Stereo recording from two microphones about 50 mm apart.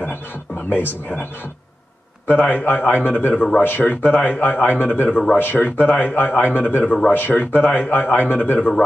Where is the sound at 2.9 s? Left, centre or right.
Centre.